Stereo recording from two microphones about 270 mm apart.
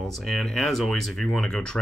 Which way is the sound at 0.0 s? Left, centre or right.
Centre.